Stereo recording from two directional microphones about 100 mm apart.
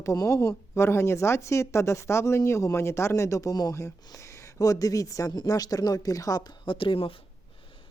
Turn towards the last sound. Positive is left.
turn(degrees=60)  # may be behind; listen again after turning